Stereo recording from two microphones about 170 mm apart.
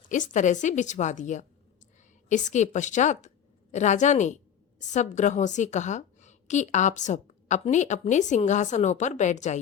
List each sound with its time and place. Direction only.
0.1 s a woman's voice: 45° left (ahead or behind)